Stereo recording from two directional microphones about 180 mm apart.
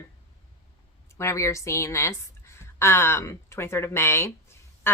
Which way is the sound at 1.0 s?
15° left (ahead or behind).